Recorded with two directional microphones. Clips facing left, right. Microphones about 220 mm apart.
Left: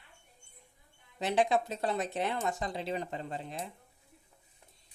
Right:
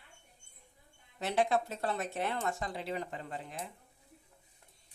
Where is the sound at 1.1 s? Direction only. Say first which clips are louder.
Left 2 dB; 15° left (ahead or behind).